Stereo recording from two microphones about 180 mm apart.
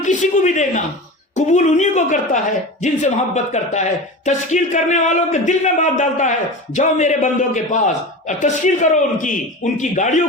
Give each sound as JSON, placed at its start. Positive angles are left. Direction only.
{"t": 0.0, "sound": "speech", "side_deg": 40}